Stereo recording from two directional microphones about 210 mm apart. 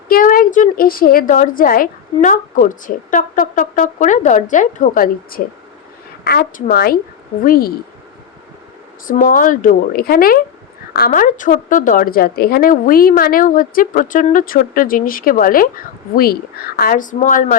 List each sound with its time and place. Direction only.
0.1 s a woman's voice: 40° left (ahead or behind)
9.0 s a woman's voice: 40° left (ahead or behind)